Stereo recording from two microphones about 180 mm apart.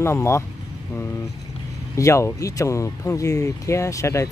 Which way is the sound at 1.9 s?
15° left (ahead or behind).